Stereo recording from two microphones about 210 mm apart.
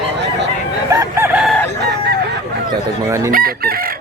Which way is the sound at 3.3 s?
45° right (ahead or behind).